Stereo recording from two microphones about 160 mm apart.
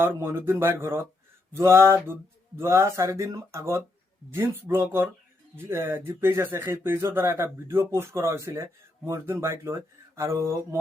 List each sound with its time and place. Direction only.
0.0 s speech: 15° right (ahead or behind)